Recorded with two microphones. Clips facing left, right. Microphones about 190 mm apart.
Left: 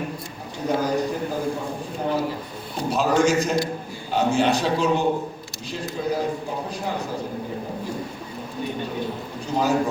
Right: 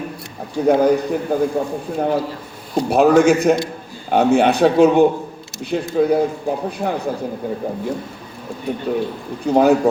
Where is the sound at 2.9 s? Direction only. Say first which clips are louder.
Right 7 dB; 60° right (ahead or behind).